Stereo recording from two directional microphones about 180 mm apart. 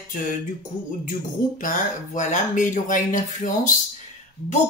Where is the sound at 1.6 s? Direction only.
45° left (ahead or behind).